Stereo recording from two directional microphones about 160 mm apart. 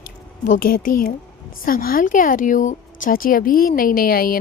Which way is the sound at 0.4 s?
60° left (ahead or behind).